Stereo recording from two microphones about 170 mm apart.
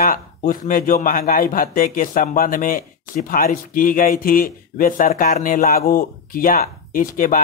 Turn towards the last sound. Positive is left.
turn(degrees=55)  # may be behind; listen again after turning